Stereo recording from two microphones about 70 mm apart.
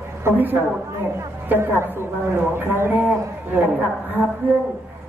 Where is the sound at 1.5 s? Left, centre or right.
Right.